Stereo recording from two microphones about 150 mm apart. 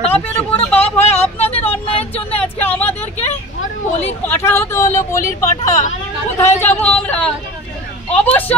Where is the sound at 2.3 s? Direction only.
10° left (ahead or behind).